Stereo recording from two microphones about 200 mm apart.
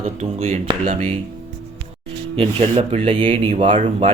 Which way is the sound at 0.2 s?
35° right (ahead or behind).